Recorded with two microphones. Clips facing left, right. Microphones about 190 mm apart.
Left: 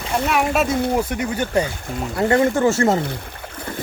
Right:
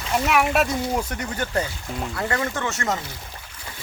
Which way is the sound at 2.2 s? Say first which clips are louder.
Left 11 dB; 30° left (ahead or behind).